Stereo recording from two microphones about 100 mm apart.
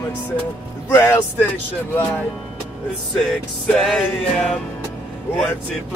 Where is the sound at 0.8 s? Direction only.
25° left (ahead or behind).